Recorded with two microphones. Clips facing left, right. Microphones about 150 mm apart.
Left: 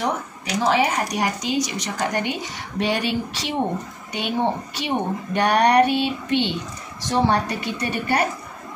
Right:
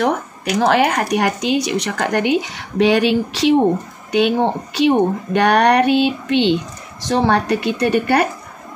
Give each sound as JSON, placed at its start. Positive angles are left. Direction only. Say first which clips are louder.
{"t": 0.6, "sound": "speech", "louder": "right 5 dB", "side_deg": -70}
{"t": 7.1, "sound": "speech", "louder": "right 4 dB", "side_deg": -80}